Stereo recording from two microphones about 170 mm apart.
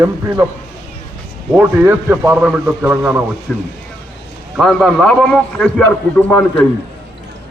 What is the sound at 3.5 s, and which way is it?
A man's voice, 5° left (ahead or behind).